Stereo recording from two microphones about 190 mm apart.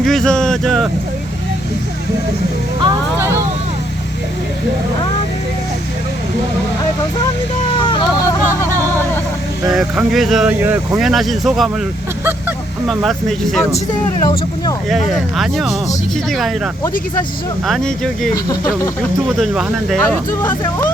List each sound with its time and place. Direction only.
0.0 s a sound: centre (ahead or behind)
2.8 s speech: 15° right (ahead or behind)
7.9 s a sound: 25° left (ahead or behind)
9.7 s speech: centre (ahead or behind)
12.9 s speech: centre (ahead or behind)
14.2 s speech: 20° left (ahead or behind)
14.8 s speech: centre (ahead or behind)
17.7 s speech: 5° left (ahead or behind)
18.4 s speech: 20° left (ahead or behind)
19.4 s speech: centre (ahead or behind)
20.4 s speech: 10° left (ahead or behind)